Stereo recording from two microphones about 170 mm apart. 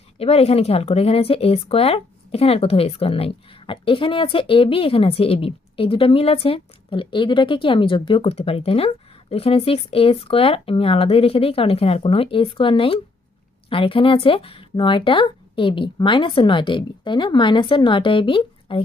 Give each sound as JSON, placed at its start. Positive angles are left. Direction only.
{"t": 0.2, "sound": "speech", "side_deg": 35}